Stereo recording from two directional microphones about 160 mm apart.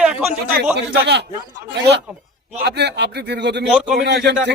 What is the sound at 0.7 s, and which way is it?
Speech, 90° right.